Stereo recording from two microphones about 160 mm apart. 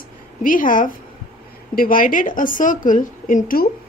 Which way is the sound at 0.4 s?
55° left (ahead or behind).